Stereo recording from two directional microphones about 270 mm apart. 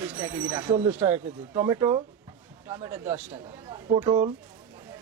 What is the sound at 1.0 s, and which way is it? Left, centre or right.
Speech, centre.